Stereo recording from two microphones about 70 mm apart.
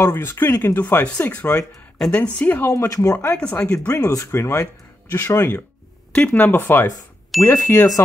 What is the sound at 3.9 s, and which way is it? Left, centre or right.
Speech, left.